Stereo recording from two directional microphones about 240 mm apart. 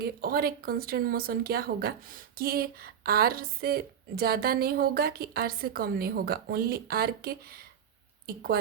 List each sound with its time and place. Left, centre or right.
0.0 s speech: right